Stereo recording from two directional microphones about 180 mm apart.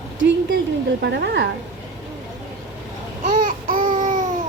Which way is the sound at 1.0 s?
75° right (ahead or behind).